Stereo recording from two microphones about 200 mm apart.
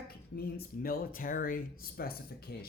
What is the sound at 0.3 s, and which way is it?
Speech, 50° left (ahead or behind).